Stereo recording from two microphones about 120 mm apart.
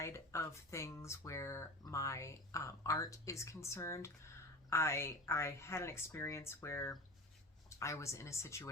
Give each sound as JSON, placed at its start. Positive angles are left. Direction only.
{"t": 0.0, "sound": "speech", "side_deg": 25}